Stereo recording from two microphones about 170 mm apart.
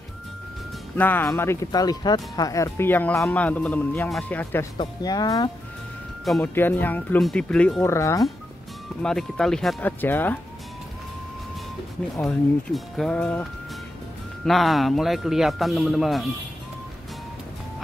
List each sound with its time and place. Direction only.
0.9 s speech: 10° left (ahead or behind)
4.7 s speech: 25° left (ahead or behind)
6.4 s speech: 10° left (ahead or behind)
9.0 s speech: 5° left (ahead or behind)
12.2 s a man's voice: 5° left (ahead or behind)